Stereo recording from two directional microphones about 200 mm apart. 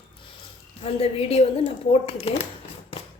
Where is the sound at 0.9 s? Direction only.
30° left (ahead or behind).